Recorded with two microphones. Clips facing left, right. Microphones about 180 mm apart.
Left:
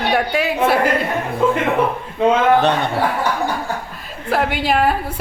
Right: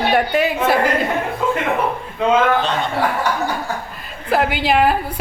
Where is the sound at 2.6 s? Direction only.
65° left (ahead or behind).